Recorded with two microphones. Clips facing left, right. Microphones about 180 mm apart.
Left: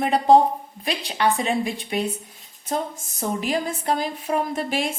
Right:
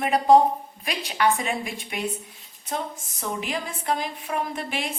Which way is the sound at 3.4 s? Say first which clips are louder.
Left 6 dB; 35° left (ahead or behind).